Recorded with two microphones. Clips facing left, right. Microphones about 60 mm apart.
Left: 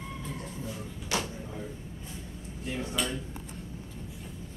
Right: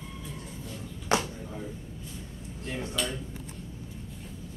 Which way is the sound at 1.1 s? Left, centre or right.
Right.